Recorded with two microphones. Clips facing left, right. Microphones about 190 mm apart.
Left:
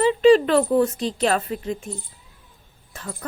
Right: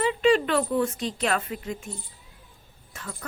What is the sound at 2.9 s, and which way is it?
Speech, 35° left (ahead or behind).